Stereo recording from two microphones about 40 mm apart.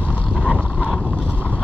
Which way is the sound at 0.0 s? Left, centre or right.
Right.